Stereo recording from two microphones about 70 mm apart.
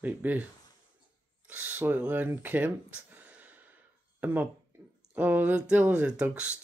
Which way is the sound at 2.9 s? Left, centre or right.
Right.